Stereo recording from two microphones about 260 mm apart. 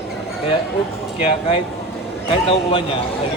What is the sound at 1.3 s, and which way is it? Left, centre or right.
A man's voice, left.